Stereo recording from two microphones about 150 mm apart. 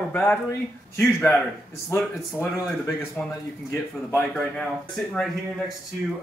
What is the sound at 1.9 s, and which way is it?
Speech, 20° left (ahead or behind).